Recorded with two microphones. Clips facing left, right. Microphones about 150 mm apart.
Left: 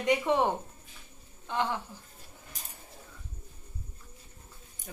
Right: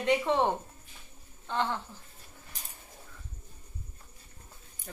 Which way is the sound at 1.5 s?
15° left (ahead or behind).